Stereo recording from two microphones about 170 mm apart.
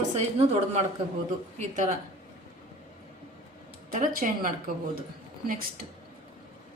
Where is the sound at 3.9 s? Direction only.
50° right (ahead or behind).